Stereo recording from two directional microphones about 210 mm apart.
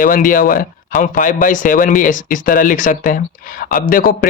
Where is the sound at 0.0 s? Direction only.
40° left (ahead or behind).